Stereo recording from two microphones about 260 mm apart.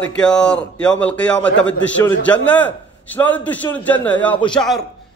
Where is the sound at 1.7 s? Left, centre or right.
Left.